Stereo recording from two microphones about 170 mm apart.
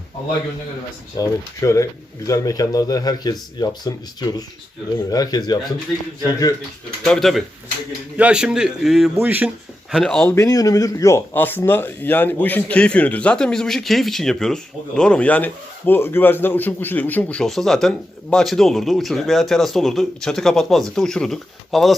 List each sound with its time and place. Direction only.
1.1 s speech: 20° left (ahead or behind)
7.0 s a man's voice: centre (ahead or behind)
9.9 s a man's voice: 5° left (ahead or behind)
10.3 s a man's voice: 20° left (ahead or behind); by 21.9 s centre (ahead or behind)